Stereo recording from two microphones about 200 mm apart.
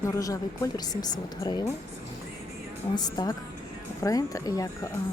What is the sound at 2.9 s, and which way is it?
A woman's voice, 20° left (ahead or behind).